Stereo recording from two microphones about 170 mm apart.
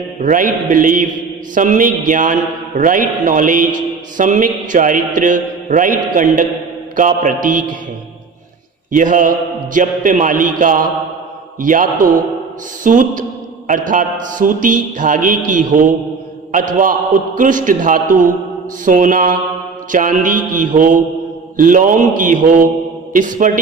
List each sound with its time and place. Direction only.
0.2 s a man's voice: 50° right (ahead or behind)
8.9 s a man's voice: 50° right (ahead or behind)